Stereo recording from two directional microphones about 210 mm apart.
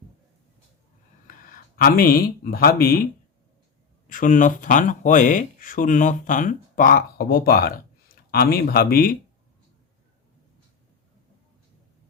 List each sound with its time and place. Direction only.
1.5 s speech: 45° left (ahead or behind)
4.0 s speech: 40° left (ahead or behind)